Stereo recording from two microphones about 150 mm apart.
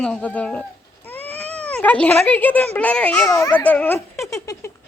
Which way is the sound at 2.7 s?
10° left (ahead or behind).